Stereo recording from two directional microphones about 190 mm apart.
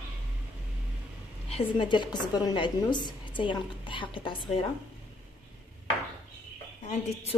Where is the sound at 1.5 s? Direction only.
25° left (ahead or behind).